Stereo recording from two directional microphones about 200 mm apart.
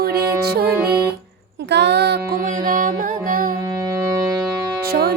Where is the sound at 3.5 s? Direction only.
20° right (ahead or behind).